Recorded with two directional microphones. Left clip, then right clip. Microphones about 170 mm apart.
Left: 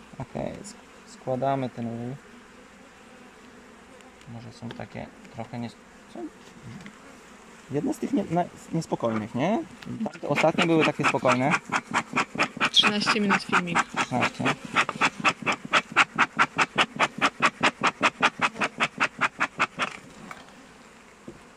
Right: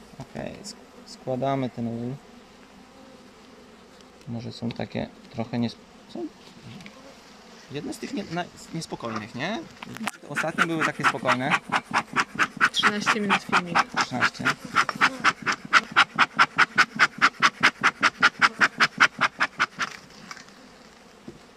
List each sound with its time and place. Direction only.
0.3 s a sound: 5° left (ahead or behind)
1.2 s speech: centre (ahead or behind)
4.4 s speech: 20° right (ahead or behind)
7.7 s speech: 15° left (ahead or behind)
12.4 s a sound: 15° left (ahead or behind)
12.9 s duck: 5° left (ahead or behind)
16.7 s music: 20° left (ahead or behind)
19.1 s duck: 5° left (ahead or behind)